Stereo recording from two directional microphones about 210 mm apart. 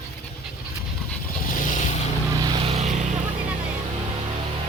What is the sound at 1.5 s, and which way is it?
Vehicle, 40° left (ahead or behind).